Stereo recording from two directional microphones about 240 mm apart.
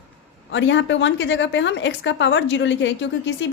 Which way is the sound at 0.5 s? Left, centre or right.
Left.